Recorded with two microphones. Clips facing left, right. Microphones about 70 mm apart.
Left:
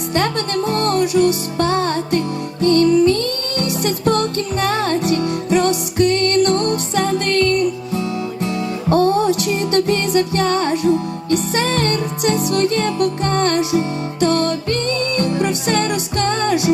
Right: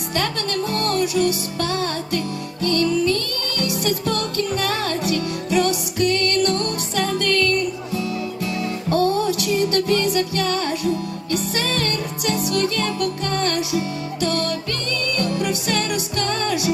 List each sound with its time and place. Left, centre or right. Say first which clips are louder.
0.1 s music: left 4 dB; left